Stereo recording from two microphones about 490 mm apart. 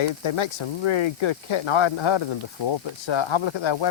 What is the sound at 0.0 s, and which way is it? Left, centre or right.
Speech, left.